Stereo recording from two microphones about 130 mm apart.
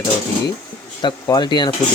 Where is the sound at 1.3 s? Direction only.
35° left (ahead or behind).